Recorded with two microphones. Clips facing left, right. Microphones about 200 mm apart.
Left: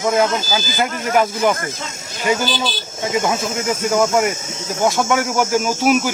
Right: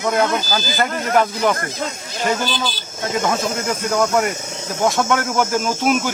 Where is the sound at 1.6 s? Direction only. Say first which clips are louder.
Right 2 dB; 50° right (ahead or behind).